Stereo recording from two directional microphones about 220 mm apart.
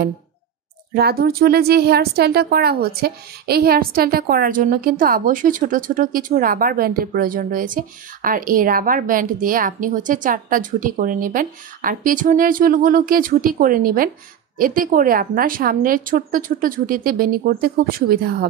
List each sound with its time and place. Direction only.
0.9 s a woman's voice: 45° right (ahead or behind)